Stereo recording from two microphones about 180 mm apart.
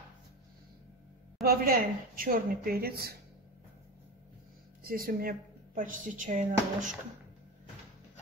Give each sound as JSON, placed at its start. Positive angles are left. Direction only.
{"t": 1.4, "sound": "a woman's voice", "side_deg": -55}
{"t": 4.8, "sound": "a woman's voice", "side_deg": -55}